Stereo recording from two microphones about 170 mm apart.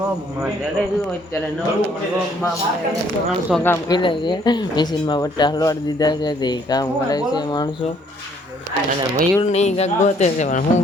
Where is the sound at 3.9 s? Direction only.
30° left (ahead or behind).